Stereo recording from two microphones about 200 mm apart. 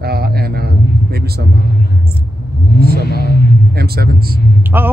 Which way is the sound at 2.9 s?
50° right (ahead or behind).